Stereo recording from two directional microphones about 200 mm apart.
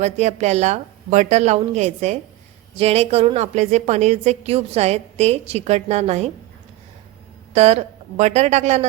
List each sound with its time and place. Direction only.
0.0 s a woman's voice: 35° right (ahead or behind)
7.5 s a woman's voice: 35° right (ahead or behind)